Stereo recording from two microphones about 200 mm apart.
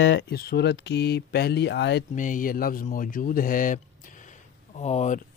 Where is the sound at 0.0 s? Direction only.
65° left (ahead or behind).